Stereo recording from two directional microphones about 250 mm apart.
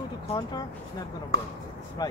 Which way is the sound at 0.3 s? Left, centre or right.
Centre.